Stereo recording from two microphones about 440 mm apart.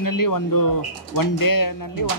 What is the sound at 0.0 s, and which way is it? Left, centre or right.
Speech, left.